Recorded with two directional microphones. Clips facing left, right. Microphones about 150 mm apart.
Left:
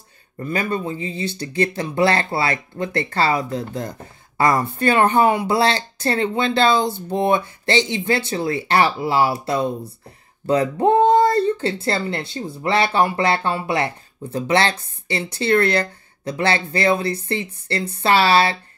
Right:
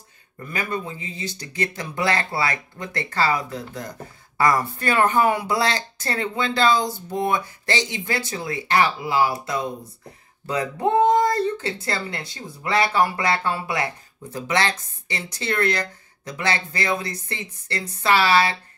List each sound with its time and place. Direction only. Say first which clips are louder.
0.4 s speech: left 5 dB; 30° left (ahead or behind)